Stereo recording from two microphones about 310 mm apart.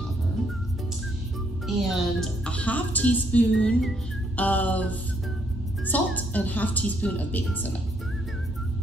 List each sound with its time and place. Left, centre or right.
1.7 s speech: centre